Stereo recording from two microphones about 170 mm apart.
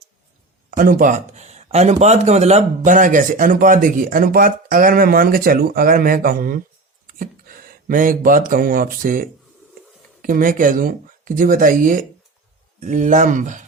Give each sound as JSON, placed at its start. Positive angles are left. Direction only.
{"t": 0.8, "sound": "speech", "side_deg": -55}